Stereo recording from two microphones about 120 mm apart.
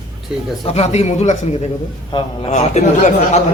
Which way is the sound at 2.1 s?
40° left (ahead or behind).